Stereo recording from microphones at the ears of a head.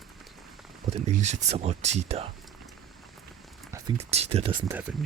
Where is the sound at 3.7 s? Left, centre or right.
Right.